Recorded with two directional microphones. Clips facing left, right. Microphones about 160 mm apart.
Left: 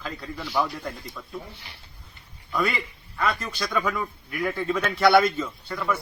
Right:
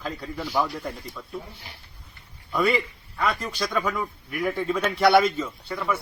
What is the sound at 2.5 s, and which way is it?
A man's voice, 10° right (ahead or behind).